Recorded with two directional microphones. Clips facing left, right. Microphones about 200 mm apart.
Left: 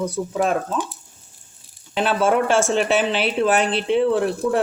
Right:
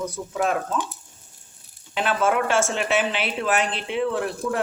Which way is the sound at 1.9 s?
35° left (ahead or behind).